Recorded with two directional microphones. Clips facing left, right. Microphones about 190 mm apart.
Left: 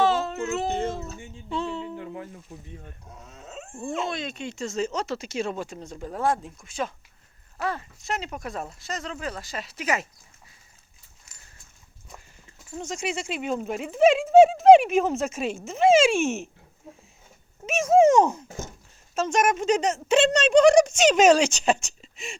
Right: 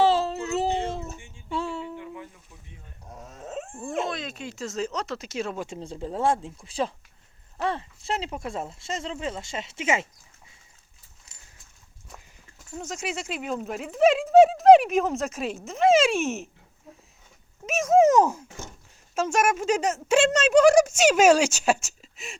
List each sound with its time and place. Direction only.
0.0 s a sound: 30° right (ahead or behind)
1.5 s music: 5° right (ahead or behind)
2.0 s snake: 40° left (ahead or behind)
3.2 s dog: 45° right (ahead or behind)
3.8 s speech: centre (ahead or behind)
5.6 s speech: 25° right (ahead or behind)
12.7 s speech: 5° right (ahead or behind)
17.7 s speech: centre (ahead or behind)